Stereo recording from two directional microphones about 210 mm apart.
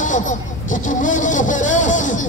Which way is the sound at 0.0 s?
35° left (ahead or behind).